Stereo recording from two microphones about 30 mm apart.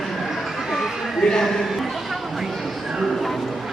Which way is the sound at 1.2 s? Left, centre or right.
Centre.